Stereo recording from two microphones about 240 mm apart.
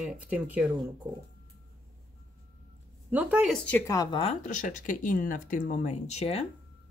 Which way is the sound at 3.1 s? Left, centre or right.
Centre.